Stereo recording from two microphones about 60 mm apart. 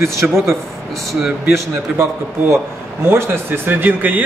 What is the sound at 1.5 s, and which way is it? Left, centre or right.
A man's voice, right.